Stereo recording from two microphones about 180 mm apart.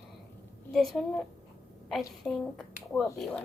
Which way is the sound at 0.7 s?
Centre (ahead or behind).